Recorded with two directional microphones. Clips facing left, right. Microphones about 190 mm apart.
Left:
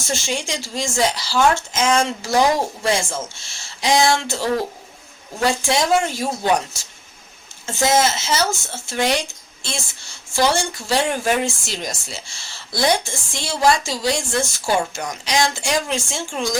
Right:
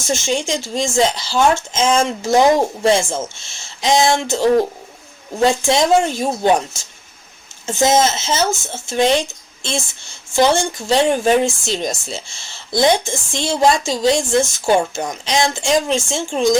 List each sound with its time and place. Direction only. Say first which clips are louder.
0.1 s a woman's voice: right 6 dB; 20° right (ahead or behind)